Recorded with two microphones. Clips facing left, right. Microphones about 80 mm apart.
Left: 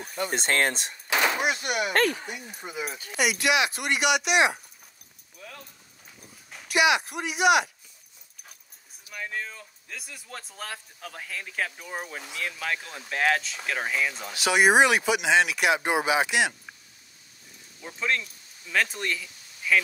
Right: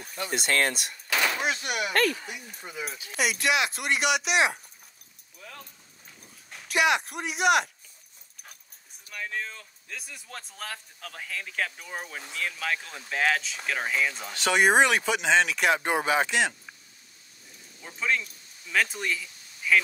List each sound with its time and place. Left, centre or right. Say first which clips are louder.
0.0 s speech: left 4 dB; centre
0.3 s speech: even; left
0.8 s a sound: left 2 dB; left
1.4 s speech: left 2 dB; centre
2.0 s speech: left 1 dB; left
2.4 s speech: left 3 dB; centre
6.5 s speech: left 2 dB; centre
9.1 s speech: even; centre
17.8 s speech: even; centre